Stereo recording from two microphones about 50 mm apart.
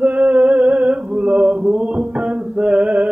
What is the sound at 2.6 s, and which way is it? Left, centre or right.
Mantra, right.